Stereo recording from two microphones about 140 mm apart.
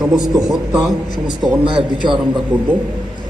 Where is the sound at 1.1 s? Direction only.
30° right (ahead or behind).